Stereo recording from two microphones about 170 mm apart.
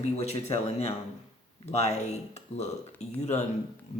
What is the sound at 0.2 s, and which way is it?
Speech, 40° left (ahead or behind).